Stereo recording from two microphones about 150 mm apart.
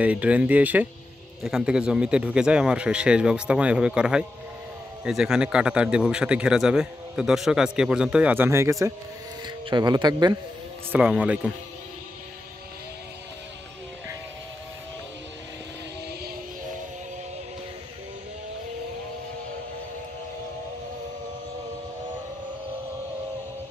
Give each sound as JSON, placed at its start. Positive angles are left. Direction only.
{"t": 0.0, "sound": "a man's voice", "side_deg": -10}
{"t": 9.7, "sound": "speech", "side_deg": -30}
{"t": 10.9, "sound": "a man's voice", "side_deg": -10}